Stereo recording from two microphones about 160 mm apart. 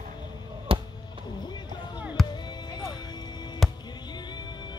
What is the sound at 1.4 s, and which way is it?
Music, 25° left (ahead or behind).